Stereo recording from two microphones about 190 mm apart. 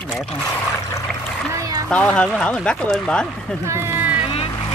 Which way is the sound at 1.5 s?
15° right (ahead or behind).